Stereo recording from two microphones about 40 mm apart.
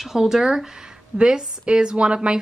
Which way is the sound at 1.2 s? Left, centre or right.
Right.